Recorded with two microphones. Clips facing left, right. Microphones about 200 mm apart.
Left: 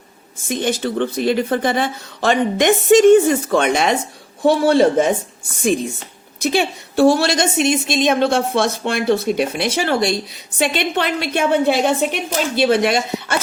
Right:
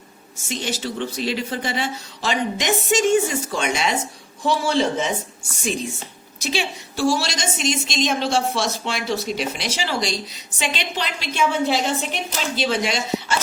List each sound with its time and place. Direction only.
0.4 s a woman's voice: 55° left (ahead or behind)
6.4 s a woman's voice: 55° left (ahead or behind)